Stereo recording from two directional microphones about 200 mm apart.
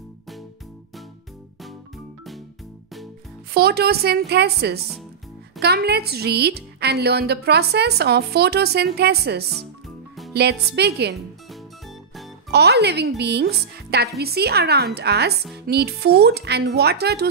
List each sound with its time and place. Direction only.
3.5 s a woman's voice: 50° right (ahead or behind)
12.4 s a woman's voice: 55° right (ahead or behind)